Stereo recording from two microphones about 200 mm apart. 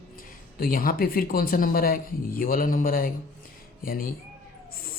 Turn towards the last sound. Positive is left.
turn(degrees=45)  # may be behind; listen again after turning